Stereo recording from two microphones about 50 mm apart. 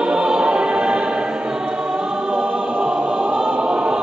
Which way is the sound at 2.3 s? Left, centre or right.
Right.